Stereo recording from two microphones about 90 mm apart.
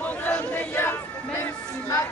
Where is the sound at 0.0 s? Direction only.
15° left (ahead or behind).